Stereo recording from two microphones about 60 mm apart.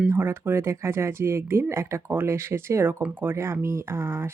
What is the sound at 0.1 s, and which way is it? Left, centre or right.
Speech, right.